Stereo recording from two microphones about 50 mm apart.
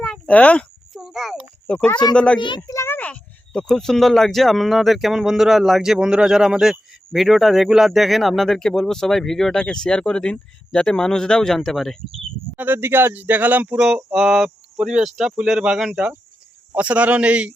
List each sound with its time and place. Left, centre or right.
0.3 s speech: left
0.9 s a sound: centre
1.6 s speech: left
3.0 s a sound: left
3.6 s speech: centre
9.6 s a man's voice: centre
12.5 s speech: right
13.7 s a man's voice: centre